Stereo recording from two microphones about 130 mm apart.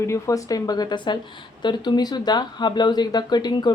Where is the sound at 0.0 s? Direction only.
25° left (ahead or behind).